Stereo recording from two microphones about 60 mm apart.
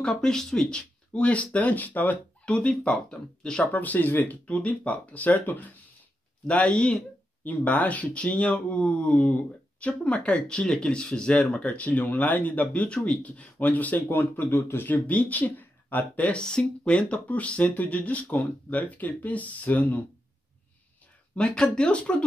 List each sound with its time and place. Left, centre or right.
0.1 s speech: centre
3.7 s speech: left
12.8 s speech: centre; by 15.0 s left
15.0 s speech: left
21.4 s speech: centre